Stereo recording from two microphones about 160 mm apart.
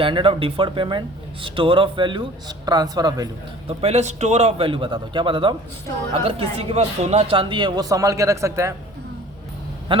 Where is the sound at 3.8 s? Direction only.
40° right (ahead or behind); by 8.7 s 20° right (ahead or behind).